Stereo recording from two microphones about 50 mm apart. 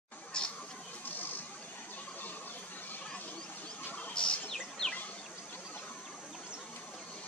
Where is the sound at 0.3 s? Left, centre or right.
Centre.